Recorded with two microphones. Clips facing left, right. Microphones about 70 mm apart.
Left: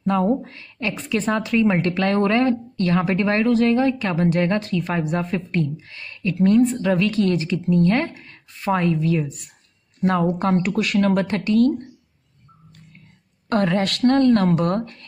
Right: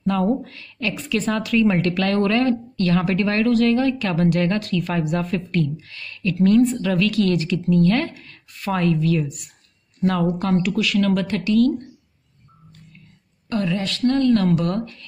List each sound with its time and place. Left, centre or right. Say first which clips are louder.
0.0 s a woman's voice: left 1 dB; left
10.0 s speech: left 1 dB; left
13.5 s speech: left 4 dB; left